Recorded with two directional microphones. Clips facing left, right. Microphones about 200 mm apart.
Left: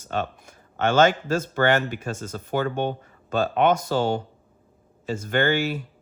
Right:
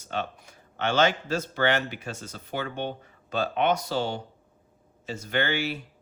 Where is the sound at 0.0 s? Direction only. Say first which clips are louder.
Left 4 dB; 50° left (ahead or behind).